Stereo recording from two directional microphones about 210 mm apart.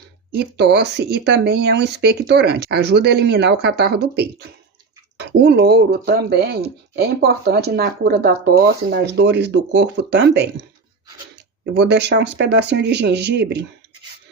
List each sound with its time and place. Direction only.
0.3 s speech: 50° right (ahead or behind)
11.6 s speech: 55° right (ahead or behind)